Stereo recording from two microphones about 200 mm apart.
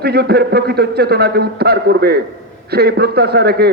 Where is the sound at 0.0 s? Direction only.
55° right (ahead or behind).